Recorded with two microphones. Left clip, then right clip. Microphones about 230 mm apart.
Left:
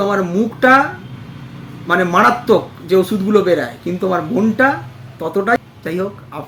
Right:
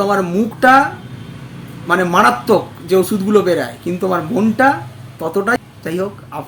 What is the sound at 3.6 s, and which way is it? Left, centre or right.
Speech, centre.